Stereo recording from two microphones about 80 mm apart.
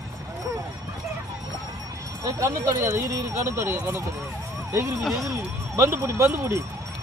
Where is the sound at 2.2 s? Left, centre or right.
Right.